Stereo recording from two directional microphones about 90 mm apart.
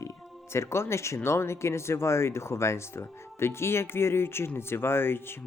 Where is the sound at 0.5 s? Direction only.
30° left (ahead or behind).